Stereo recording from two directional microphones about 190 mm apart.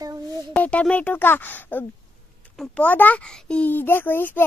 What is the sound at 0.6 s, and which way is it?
Speech, 5° left (ahead or behind).